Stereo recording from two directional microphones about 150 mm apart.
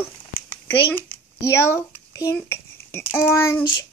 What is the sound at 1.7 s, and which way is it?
A child's voice, 20° left (ahead or behind).